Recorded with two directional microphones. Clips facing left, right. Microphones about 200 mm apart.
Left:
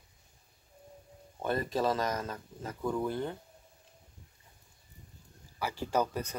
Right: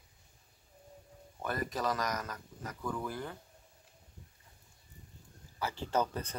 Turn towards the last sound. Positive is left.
turn(degrees=10)  # may be behind; listen again after turning